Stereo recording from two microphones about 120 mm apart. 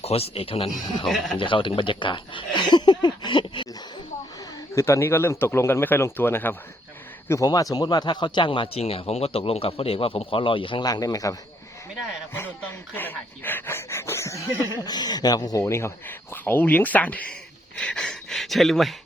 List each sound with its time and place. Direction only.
0.0 s a man's voice: 55° left (ahead or behind)
4.7 s speech: 25° left (ahead or behind)
7.3 s a man's voice: 30° left (ahead or behind); by 10.8 s 45° left (ahead or behind)
10.8 s speech: 30° left (ahead or behind)
12.9 s speech: 15° left (ahead or behind)
14.8 s speech: 35° left (ahead or behind); by 18.9 s centre (ahead or behind)